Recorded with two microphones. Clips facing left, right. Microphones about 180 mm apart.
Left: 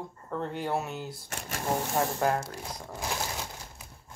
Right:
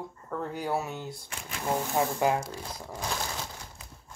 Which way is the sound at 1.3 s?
45° left (ahead or behind).